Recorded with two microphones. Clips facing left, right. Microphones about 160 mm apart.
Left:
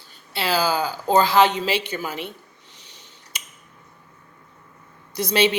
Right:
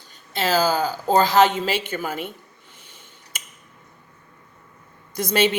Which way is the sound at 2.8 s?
50° right (ahead or behind).